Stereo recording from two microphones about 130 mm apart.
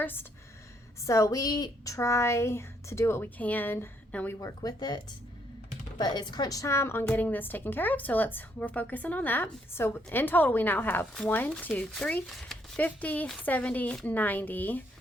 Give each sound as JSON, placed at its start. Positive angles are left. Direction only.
{"t": 0.0, "sound": "a woman's voice", "side_deg": 15}
{"t": 4.4, "sound": "a woman's voice", "side_deg": 30}
{"t": 6.0, "sound": "a woman's voice", "side_deg": 35}
{"t": 11.0, "sound": "a woman's voice", "side_deg": 5}